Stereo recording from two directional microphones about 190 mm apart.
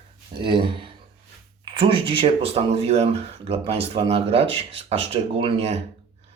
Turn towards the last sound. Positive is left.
turn(degrees=-30)  # may be behind; listen again after turning